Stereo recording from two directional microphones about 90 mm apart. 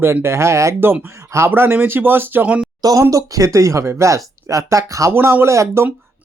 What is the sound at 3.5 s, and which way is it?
Speech, 35° right (ahead or behind).